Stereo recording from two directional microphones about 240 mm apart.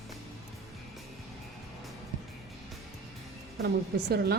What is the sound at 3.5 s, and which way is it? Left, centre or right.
Speech, right.